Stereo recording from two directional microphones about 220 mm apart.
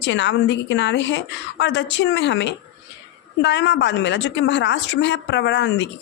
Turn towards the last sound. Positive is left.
turn(degrees=55)  # may be behind; listen again after turning